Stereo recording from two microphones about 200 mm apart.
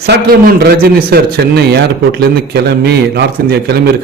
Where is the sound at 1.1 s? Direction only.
50° right (ahead or behind).